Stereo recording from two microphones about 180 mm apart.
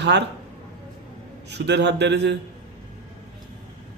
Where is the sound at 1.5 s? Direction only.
70° right (ahead or behind).